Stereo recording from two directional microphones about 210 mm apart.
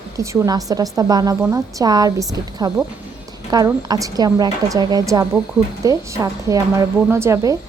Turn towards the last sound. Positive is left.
turn(degrees=-15)  # may be behind; listen again after turning